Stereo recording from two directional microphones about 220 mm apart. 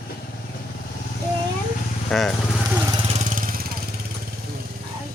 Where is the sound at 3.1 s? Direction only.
30° right (ahead or behind).